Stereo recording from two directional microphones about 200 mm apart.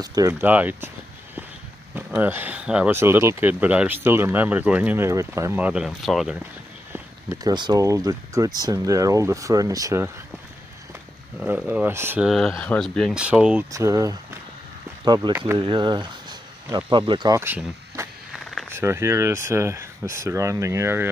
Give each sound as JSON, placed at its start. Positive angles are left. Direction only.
{"t": 0.0, "sound": "speech", "side_deg": -20}
{"t": 2.0, "sound": "speech", "side_deg": -10}
{"t": 6.9, "sound": "speech", "side_deg": -15}
{"t": 11.3, "sound": "speech", "side_deg": -10}
{"t": 12.3, "sound": "speech", "side_deg": 5}
{"t": 15.5, "sound": "speech", "side_deg": -25}
{"t": 18.3, "sound": "a sound", "side_deg": 0}
{"t": 18.7, "sound": "speech", "side_deg": -10}